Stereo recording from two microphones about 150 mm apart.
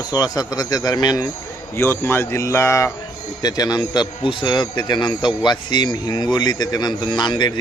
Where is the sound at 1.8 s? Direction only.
15° left (ahead or behind).